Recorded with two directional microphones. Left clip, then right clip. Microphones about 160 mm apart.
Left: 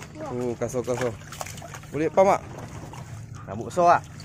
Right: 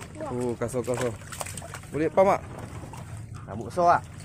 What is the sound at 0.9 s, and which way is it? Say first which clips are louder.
Trickle: left 2 dB; 15° right (ahead or behind).